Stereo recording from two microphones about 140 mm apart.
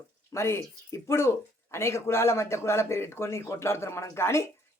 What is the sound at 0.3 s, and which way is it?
Speech, 20° left (ahead or behind).